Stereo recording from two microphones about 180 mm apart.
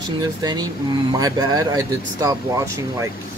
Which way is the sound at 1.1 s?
20° right (ahead or behind).